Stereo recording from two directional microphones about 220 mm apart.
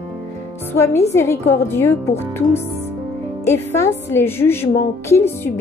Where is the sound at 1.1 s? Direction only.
10° left (ahead or behind).